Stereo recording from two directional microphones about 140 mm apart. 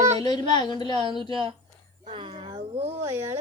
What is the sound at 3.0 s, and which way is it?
Speech, 20° right (ahead or behind).